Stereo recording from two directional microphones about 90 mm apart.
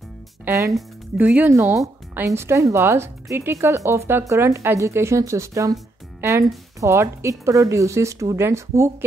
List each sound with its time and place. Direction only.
0.5 s speech: 35° right (ahead or behind)
1.1 s speech: 15° right (ahead or behind)
1.5 s speech: 35° right (ahead or behind)
6.8 s speech: 30° right (ahead or behind)